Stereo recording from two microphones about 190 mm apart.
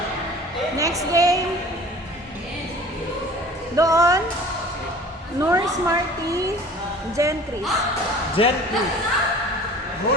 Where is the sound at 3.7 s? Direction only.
20° right (ahead or behind).